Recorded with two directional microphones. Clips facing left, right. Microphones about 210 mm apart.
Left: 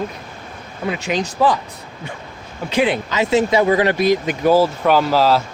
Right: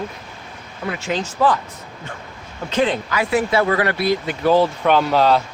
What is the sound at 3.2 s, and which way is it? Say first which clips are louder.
Speech: left 3 dB; 20° left (ahead or behind).